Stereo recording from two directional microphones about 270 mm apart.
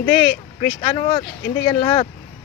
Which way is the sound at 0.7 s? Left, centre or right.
Centre.